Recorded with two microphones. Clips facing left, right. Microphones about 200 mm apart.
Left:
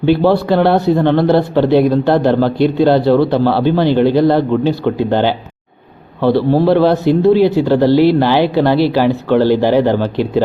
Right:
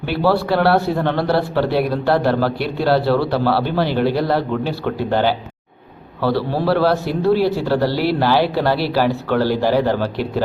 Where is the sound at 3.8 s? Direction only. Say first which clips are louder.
Left 8 dB; 5° right (ahead or behind).